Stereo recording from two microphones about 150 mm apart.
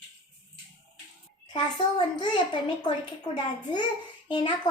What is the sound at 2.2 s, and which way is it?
A woman's voice, 30° left (ahead or behind).